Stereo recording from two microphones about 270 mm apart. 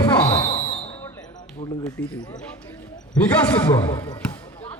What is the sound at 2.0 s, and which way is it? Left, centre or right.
Speech, left.